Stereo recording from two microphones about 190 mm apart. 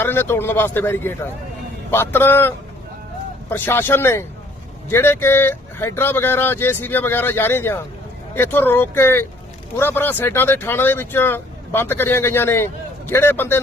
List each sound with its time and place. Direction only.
0.0 s speech: 10° left (ahead or behind)
3.5 s speech: 10° left (ahead or behind)